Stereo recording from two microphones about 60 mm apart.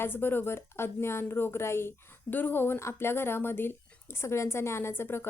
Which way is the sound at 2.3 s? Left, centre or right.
Left.